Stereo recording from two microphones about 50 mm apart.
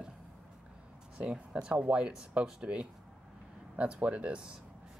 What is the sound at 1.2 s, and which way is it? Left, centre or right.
Speech, right.